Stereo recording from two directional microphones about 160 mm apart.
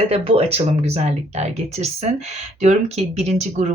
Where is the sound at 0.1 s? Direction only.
40° right (ahead or behind).